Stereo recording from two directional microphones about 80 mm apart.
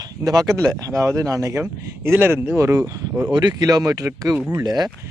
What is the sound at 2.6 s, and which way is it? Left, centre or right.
Speech, right.